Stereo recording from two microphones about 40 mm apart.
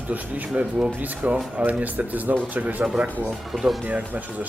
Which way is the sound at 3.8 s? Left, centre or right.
Right.